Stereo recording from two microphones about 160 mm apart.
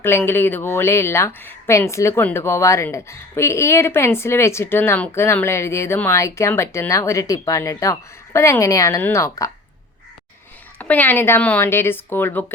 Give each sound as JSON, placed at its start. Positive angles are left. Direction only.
{"t": 0.0, "sound": "speech", "side_deg": 15}
{"t": 10.8, "sound": "speech", "side_deg": 10}